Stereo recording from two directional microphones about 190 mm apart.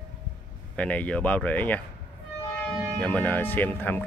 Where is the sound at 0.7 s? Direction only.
5° left (ahead or behind).